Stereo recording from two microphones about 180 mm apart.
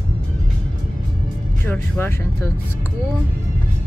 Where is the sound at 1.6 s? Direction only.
15° left (ahead or behind).